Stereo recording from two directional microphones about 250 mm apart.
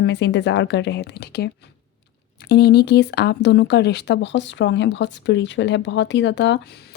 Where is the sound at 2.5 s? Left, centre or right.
Left.